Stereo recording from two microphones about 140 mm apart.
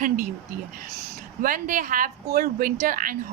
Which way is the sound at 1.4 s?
80° right.